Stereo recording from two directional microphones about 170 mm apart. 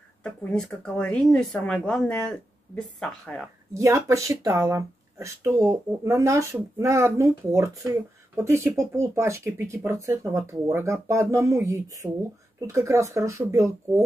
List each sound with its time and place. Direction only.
0.2 s speech: 5° left (ahead or behind)
3.7 s speech: 20° right (ahead or behind)